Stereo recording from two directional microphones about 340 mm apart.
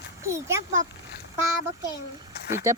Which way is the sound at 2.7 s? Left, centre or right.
Centre.